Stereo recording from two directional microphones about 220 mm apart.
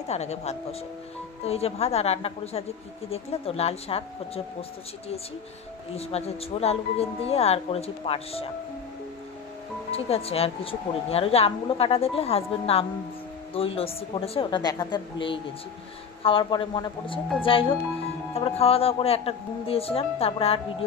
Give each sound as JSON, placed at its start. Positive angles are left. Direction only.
{"t": 0.1, "sound": "speech", "side_deg": 30}
{"t": 5.9, "sound": "speech", "side_deg": 30}
{"t": 9.8, "sound": "speech", "side_deg": 25}